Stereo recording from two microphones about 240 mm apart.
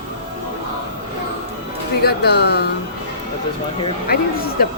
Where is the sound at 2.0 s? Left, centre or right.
Left.